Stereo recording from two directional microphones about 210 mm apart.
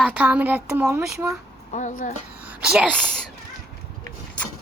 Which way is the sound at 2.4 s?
5° right (ahead or behind).